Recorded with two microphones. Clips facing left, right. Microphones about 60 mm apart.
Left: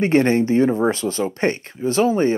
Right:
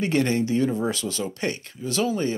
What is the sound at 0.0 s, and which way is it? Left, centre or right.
Speech, left.